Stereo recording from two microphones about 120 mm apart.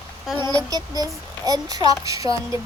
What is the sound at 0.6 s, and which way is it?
Speech, 30° right (ahead or behind).